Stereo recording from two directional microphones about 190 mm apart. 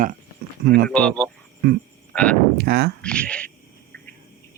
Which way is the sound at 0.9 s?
5° left (ahead or behind).